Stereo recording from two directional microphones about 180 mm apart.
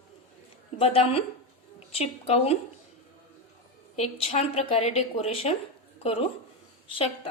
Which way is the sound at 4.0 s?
35° left (ahead or behind).